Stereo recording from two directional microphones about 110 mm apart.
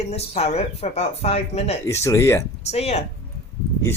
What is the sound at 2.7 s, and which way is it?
Speech, 75° left (ahead or behind).